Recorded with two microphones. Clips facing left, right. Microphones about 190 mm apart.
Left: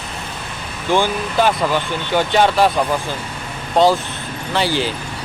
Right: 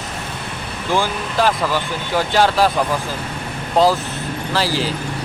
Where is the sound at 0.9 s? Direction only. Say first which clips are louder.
Left 2 dB; centre (ahead or behind).